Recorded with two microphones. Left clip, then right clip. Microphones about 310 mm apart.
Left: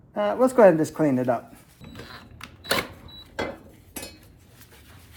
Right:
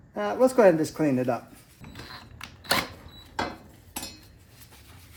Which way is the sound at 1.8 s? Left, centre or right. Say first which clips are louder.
Left 1 dB; centre.